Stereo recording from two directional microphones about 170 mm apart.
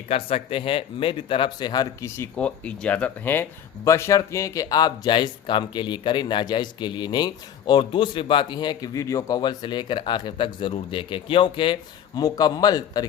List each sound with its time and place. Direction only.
0.1 s speech: 35° left (ahead or behind)